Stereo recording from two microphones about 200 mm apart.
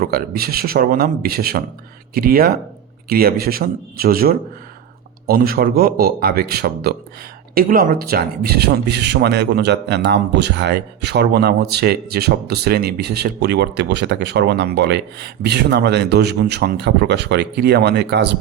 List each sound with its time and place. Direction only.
0.0 s speech: 50° right (ahead or behind)